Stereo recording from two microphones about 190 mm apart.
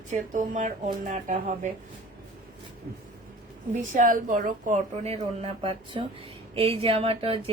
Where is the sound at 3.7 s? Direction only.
40° right (ahead or behind).